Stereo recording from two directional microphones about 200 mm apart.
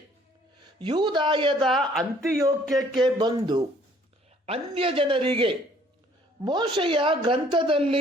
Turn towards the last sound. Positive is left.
turn(degrees=-25)  # may be behind; listen again after turning